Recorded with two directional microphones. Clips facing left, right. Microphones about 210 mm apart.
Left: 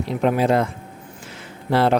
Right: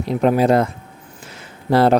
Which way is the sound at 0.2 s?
40° right (ahead or behind).